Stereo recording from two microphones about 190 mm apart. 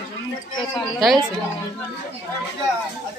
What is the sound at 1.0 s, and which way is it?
Speech, centre (ahead or behind).